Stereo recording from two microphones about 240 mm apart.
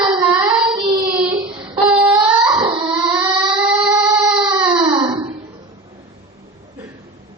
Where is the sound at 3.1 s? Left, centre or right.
Centre.